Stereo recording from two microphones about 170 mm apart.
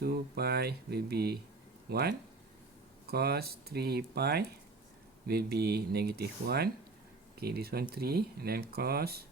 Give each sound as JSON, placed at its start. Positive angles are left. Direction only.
{"t": 0.0, "sound": "speech", "side_deg": -70}